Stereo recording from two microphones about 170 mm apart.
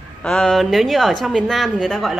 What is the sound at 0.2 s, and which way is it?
Speech, 5° left (ahead or behind).